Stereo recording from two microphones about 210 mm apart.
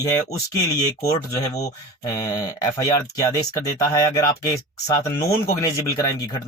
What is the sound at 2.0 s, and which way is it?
Speech, 15° left (ahead or behind).